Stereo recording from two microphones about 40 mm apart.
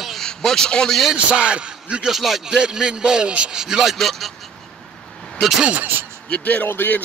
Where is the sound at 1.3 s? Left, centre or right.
Right.